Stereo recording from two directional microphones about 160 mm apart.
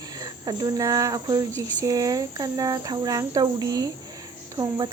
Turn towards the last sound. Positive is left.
turn(degrees=-30)  # may be behind; listen again after turning